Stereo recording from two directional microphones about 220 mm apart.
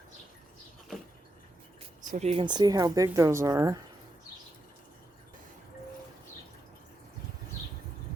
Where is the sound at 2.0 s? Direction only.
35° right (ahead or behind); by 3.7 s 15° right (ahead or behind).